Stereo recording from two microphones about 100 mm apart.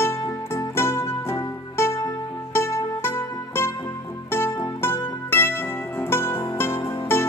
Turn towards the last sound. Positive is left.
turn(degrees=25)  # may be behind; listen again after turning